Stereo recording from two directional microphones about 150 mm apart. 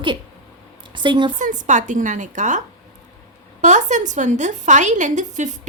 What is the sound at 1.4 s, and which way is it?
A woman's voice, 55° right (ahead or behind).